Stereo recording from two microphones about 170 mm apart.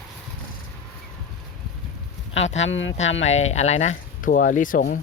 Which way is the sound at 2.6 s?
90° left.